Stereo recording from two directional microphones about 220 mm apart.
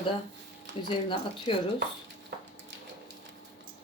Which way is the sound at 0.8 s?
25° left (ahead or behind).